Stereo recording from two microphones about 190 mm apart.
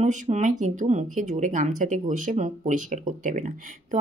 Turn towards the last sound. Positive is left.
turn(degrees=-40)  # may be behind; listen again after turning